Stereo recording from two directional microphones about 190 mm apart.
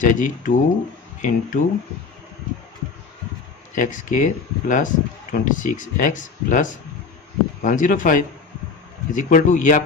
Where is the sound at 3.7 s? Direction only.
45° left (ahead or behind).